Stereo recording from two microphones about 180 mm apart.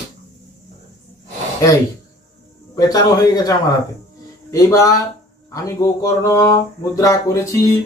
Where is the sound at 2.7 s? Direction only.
20° left (ahead or behind).